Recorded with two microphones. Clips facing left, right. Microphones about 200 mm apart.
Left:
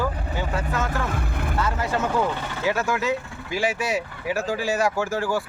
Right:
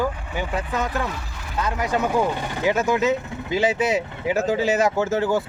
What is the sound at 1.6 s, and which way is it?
Speech, 15° right (ahead or behind).